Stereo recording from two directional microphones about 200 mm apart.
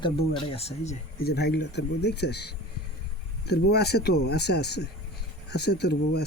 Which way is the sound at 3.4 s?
55° left (ahead or behind).